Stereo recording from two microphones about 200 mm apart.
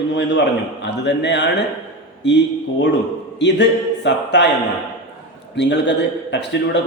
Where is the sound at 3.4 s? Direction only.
60° left (ahead or behind).